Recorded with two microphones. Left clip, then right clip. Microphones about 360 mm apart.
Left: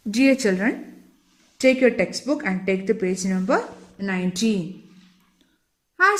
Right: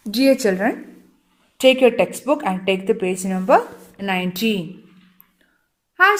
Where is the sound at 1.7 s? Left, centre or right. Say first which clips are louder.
Right 4 dB; right.